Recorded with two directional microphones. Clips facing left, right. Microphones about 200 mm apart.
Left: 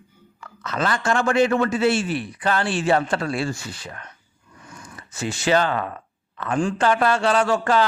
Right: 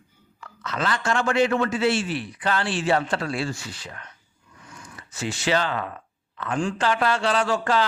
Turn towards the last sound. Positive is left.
turn(degrees=50)  # may be behind; listen again after turning